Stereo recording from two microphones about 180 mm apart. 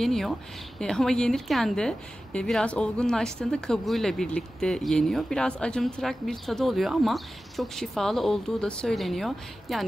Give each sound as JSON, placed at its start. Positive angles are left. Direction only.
{"t": 0.0, "sound": "a woman's voice", "side_deg": 0}